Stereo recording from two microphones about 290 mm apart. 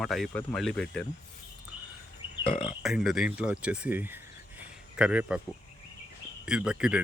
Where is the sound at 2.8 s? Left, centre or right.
Centre.